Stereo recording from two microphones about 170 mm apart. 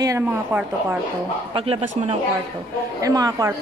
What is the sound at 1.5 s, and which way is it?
Speech, 35° right (ahead or behind).